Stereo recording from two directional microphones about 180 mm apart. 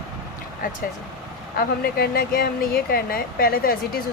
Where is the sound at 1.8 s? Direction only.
60° left (ahead or behind).